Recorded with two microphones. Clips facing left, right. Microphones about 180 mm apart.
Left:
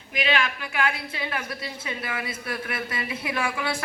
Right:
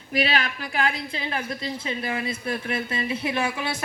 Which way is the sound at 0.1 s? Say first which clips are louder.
Right 1 dB; 40° right (ahead or behind).